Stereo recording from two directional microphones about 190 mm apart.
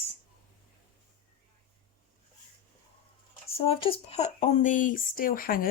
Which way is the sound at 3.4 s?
30° left (ahead or behind).